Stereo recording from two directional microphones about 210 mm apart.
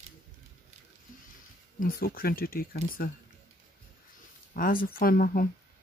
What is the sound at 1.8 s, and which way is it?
Speech, 45° left (ahead or behind).